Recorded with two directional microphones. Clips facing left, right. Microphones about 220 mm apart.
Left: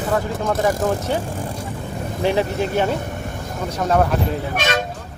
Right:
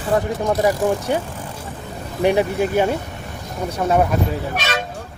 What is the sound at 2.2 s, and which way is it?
Speech, 15° right (ahead or behind).